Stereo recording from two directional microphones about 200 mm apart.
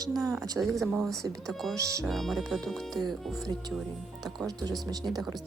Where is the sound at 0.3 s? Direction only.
15° right (ahead or behind).